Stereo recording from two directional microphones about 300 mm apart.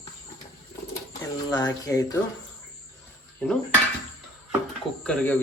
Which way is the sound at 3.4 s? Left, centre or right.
Centre.